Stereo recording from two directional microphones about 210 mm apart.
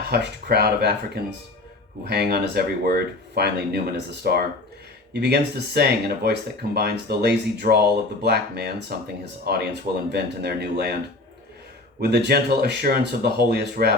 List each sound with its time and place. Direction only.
0.1 s speech: 50° right (ahead or behind)
11.9 s speech: 50° right (ahead or behind)